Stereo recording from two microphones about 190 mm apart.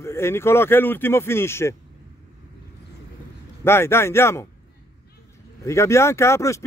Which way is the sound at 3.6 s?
15° left (ahead or behind).